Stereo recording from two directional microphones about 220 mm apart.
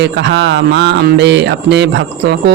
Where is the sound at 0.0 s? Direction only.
50° right (ahead or behind).